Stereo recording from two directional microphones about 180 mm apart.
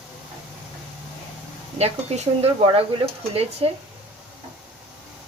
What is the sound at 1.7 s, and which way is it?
Speech, 35° right (ahead or behind).